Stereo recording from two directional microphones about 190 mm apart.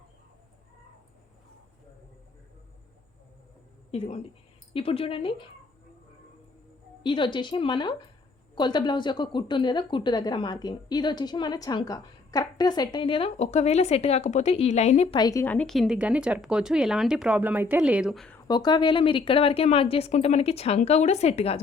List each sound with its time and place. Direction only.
3.9 s a woman's voice: 35° left (ahead or behind)
7.0 s a woman's voice: 25° left (ahead or behind)
15.2 s speech: 15° left (ahead or behind)
18.4 s a woman's voice: 20° left (ahead or behind)